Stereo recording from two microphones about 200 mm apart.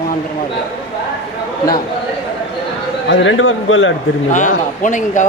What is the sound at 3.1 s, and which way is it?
Speech, 70° left (ahead or behind).